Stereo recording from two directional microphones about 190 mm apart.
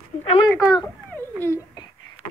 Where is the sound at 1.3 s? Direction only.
15° left (ahead or behind).